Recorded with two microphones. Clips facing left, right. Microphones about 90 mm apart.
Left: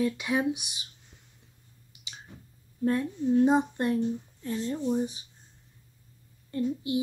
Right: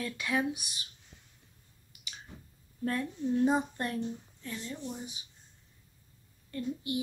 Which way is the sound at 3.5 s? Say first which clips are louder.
Left 5 dB; 20° left (ahead or behind).